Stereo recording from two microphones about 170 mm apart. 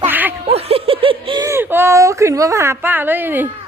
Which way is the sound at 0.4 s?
35° right (ahead or behind).